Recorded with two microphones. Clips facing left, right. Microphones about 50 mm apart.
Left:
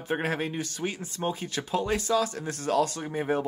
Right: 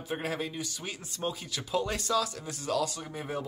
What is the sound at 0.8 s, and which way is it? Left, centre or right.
Speech, left.